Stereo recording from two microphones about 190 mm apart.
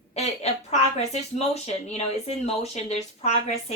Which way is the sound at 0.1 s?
35° left (ahead or behind).